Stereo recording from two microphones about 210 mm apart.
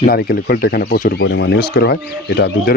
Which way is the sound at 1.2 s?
55° left (ahead or behind).